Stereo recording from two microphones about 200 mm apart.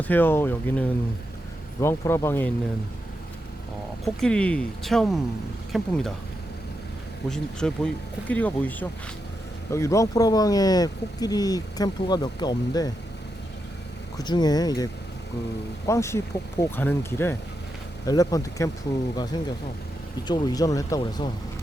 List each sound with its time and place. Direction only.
0.0 s speech: 10° left (ahead or behind)
4.0 s speech: 5° left (ahead or behind)
7.3 s speech: 5° left (ahead or behind); by 12.9 s 20° left (ahead or behind)
14.2 s speech: 20° left (ahead or behind)
15.9 s speech: 15° left (ahead or behind)